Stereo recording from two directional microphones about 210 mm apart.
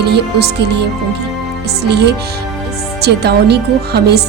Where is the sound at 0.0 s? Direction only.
50° right (ahead or behind).